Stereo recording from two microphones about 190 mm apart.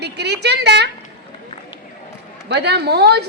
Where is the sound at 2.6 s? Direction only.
60° right (ahead or behind).